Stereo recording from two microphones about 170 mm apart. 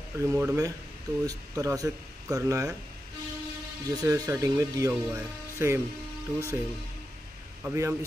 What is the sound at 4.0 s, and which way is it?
Speech, 20° right (ahead or behind).